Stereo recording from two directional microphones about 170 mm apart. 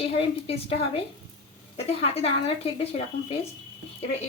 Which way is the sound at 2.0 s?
35° left (ahead or behind).